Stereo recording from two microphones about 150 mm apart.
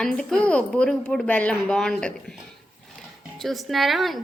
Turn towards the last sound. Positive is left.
turn(degrees=0)  # may be behind; listen again after turning